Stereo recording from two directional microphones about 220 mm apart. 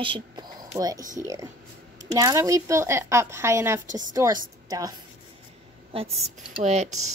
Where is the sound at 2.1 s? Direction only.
15° right (ahead or behind).